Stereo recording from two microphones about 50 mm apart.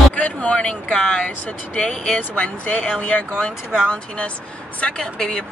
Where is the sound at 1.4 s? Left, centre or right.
Left.